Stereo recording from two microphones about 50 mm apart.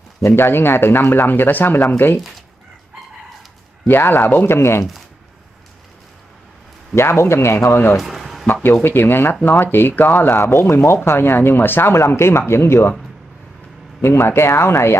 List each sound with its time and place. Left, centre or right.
0.4 s speech: left
3.8 s speech: left
4.5 s speech: left
7.0 s speech: left
8.0 s a sound: centre
8.8 s speech: left
12.1 s speech: left
14.0 s speech: left